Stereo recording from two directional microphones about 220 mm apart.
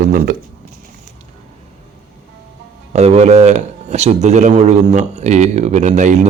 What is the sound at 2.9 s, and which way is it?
Speech, 30° right (ahead or behind).